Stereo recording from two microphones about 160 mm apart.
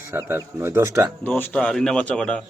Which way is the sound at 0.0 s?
15° right (ahead or behind).